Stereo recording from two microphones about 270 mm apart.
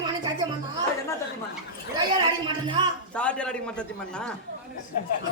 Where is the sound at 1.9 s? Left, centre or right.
Centre.